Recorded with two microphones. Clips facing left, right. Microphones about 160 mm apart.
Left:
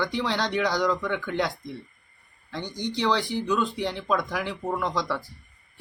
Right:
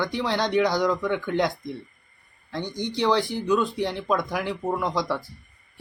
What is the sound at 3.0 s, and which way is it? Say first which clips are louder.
Speech: right 3 dB; 15° right (ahead or behind).